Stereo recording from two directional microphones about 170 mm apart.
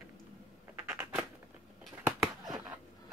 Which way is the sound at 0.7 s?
10° right (ahead or behind).